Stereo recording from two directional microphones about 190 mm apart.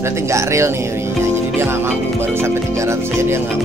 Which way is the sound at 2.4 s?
15° right (ahead or behind).